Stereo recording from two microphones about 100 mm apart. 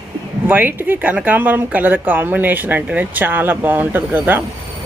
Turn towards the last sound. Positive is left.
turn(degrees=-20)  # may be behind; listen again after turning